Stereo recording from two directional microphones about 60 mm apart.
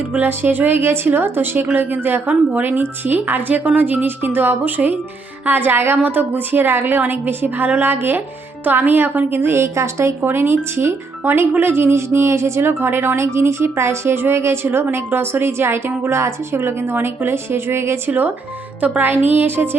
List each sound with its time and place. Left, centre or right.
0.1 s a woman's voice: right
2.3 s speech: right
2.6 s a woman's voice: right
10.2 s a woman's voice: right
18.8 s a woman's voice: right